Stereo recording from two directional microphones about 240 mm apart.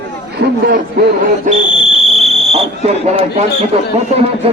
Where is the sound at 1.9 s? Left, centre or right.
Centre.